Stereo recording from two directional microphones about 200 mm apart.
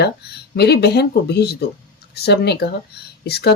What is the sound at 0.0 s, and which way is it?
Speech, 55° left (ahead or behind).